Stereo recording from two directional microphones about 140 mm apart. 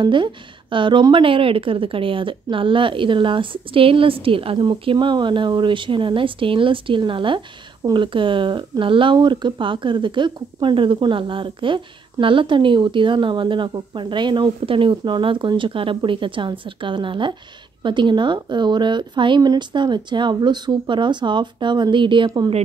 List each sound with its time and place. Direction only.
0.0 s a woman's voice: 35° right (ahead or behind)